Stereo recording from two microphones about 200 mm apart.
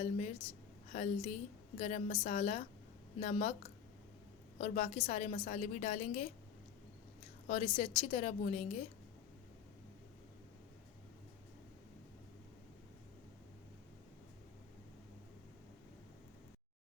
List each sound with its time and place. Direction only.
0.0 s a woman's voice: 35° left (ahead or behind)
4.5 s a woman's voice: 35° left (ahead or behind)
7.4 s a woman's voice: 35° left (ahead or behind)